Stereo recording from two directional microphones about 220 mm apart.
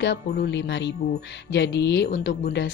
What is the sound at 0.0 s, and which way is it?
Speech, 50° left (ahead or behind).